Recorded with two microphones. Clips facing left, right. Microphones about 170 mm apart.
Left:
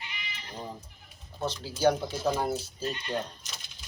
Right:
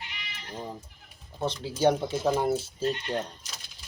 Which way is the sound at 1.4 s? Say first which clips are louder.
Right 2 dB; 25° right (ahead or behind).